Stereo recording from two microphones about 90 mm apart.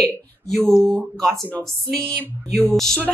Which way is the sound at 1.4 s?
20° left (ahead or behind).